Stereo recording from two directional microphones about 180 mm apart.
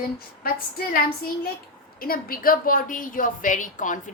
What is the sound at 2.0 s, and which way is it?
A woman's voice, 55° left (ahead or behind).